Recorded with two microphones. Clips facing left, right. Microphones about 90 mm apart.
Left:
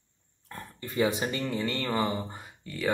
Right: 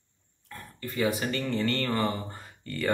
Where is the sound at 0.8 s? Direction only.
20° left (ahead or behind).